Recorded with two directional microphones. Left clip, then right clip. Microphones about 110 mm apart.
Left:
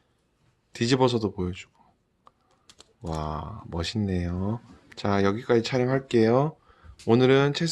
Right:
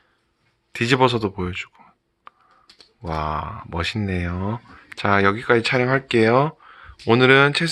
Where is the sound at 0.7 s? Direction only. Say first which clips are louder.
Right 5 dB; 25° left (ahead or behind).